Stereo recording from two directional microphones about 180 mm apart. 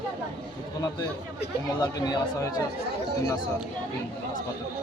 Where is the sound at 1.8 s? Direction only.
20° left (ahead or behind).